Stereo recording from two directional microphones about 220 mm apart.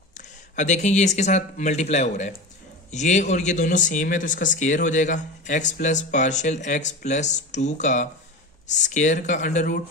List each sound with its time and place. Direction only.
0.2 s speech: 35° left (ahead or behind)